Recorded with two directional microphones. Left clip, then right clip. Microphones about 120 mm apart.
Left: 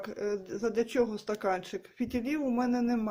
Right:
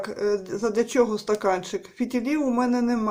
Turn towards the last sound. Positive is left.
turn(degrees=30)  # may be behind; listen again after turning